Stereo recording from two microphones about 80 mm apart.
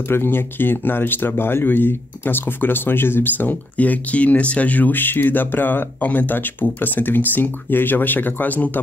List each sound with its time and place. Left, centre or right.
0.1 s speech: left